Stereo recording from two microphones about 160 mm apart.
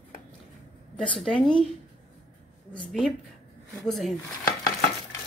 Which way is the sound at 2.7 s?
5° left (ahead or behind).